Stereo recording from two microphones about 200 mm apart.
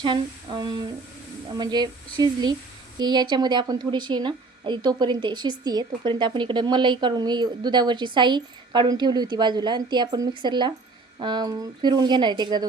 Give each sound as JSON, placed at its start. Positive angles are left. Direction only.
{"t": 0.0, "sound": "a woman's voice", "side_deg": -20}